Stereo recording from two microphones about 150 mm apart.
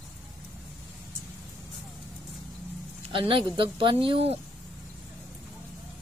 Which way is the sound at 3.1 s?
35° right (ahead or behind).